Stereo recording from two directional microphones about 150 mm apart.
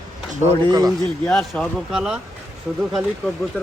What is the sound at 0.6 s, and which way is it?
Speech, 25° right (ahead or behind).